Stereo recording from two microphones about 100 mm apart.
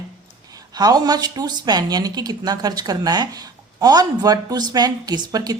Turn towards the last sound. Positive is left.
turn(degrees=-40)  # may be behind; listen again after turning